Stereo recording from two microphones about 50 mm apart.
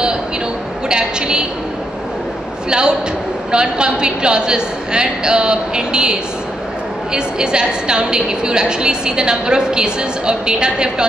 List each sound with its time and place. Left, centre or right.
0.8 s a woman's voice: centre
2.7 s a woman's voice: centre